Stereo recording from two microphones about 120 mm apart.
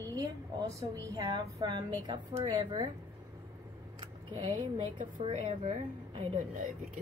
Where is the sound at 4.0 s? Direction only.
40° right (ahead or behind).